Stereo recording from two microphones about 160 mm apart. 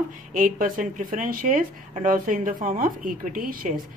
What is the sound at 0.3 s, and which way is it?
Speech, 60° right (ahead or behind).